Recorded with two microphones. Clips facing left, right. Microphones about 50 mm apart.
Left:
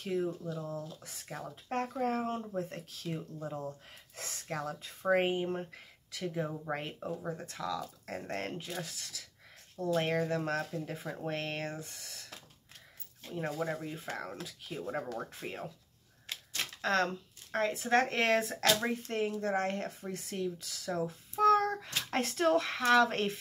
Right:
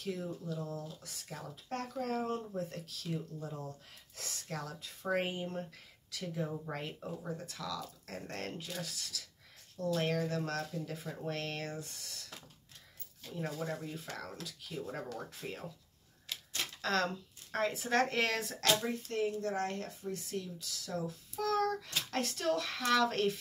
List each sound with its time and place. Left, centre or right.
0.0 s speech: centre
0.6 s speech: centre
1.9 s speech: left
6.1 s speech: centre
13.2 s speech: left
16.8 s speech: centre
18.8 s speech: left
19.4 s speech: left
20.9 s hands: centre
22.3 s speech: centre